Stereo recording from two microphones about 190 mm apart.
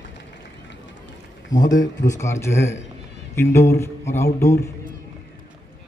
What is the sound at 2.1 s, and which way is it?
Music, 15° left (ahead or behind).